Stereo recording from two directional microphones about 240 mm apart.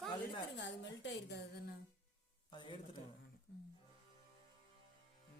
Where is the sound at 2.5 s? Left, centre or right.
Centre.